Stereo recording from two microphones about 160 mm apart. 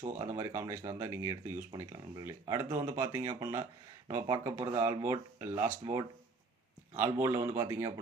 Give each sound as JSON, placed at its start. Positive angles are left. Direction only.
{"t": 0.2, "sound": "a man's voice", "side_deg": -20}
{"t": 4.9, "sound": "speech", "side_deg": -30}
{"t": 5.4, "sound": "a man's voice", "side_deg": -15}
{"t": 5.8, "sound": "speech", "side_deg": -30}
{"t": 6.9, "sound": "a man's voice", "side_deg": -15}